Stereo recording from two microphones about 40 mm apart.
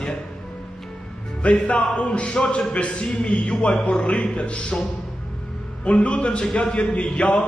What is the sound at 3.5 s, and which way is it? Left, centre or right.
Speech, centre.